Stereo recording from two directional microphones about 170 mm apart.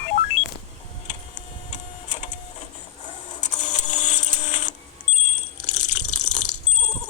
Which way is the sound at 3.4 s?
45° left (ahead or behind).